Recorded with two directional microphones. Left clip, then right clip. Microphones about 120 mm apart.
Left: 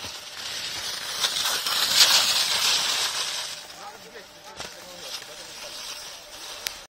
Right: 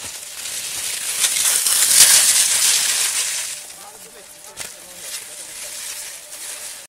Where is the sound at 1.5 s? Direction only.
20° right (ahead or behind); by 6.6 s centre (ahead or behind).